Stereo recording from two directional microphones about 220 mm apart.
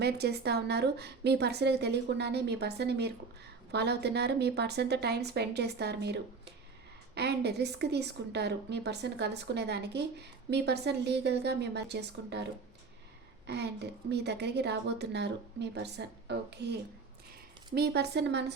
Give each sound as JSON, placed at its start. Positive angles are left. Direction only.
{"t": 0.0, "sound": "a woman's voice", "side_deg": -50}
{"t": 14.1, "sound": "a woman's voice", "side_deg": -50}